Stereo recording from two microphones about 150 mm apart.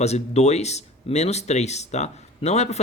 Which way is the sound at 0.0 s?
45° left (ahead or behind).